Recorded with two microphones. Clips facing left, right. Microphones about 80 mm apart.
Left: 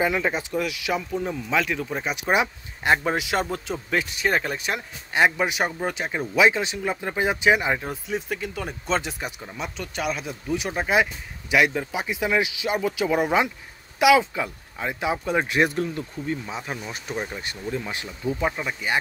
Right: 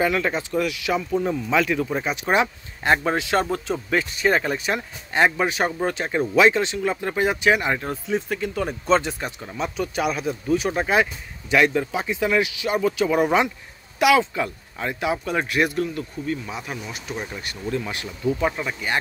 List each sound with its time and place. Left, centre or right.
0.0 s speech: centre
2.1 s speech: centre
3.4 s speech: centre